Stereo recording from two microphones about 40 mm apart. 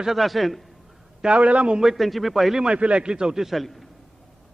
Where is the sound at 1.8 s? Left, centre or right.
Centre.